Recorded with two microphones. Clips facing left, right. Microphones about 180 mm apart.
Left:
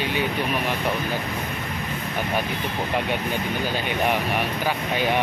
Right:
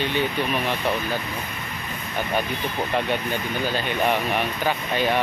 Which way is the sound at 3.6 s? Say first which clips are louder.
Right 2 dB; 15° left (ahead or behind).